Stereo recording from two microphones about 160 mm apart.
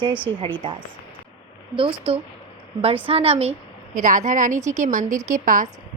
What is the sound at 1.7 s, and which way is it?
A woman's voice, 35° right (ahead or behind).